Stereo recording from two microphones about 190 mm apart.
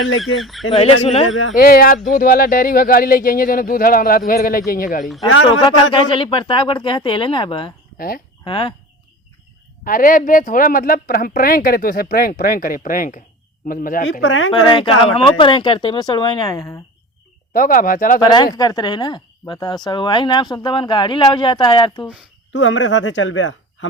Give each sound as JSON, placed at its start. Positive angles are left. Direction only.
{"t": 1.0, "sound": "speech", "side_deg": 30}
{"t": 1.3, "sound": "a man's voice", "side_deg": 90}
{"t": 1.5, "sound": "speech", "side_deg": 50}
{"t": 5.3, "sound": "a man's voice", "side_deg": 90}
{"t": 5.6, "sound": "a woman's voice", "side_deg": 25}
{"t": 7.9, "sound": "speech", "side_deg": 50}
{"t": 8.4, "sound": "a woman's voice", "side_deg": 25}
{"t": 9.8, "sound": "speech", "side_deg": 45}
{"t": 14.1, "sound": "speech", "side_deg": 70}
{"t": 14.5, "sound": "a woman's voice", "side_deg": 25}
{"t": 17.5, "sound": "speech", "side_deg": 45}
{"t": 18.2, "sound": "a woman's voice", "side_deg": 20}
{"t": 22.5, "sound": "speech", "side_deg": 75}